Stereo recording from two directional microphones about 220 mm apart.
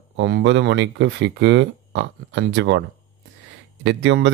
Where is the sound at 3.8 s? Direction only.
55° right (ahead or behind).